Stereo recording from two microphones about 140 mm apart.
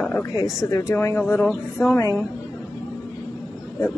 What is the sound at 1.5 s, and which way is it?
Speech, centre (ahead or behind).